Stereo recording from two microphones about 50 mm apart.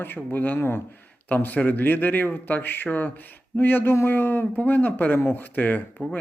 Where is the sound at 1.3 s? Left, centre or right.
Left.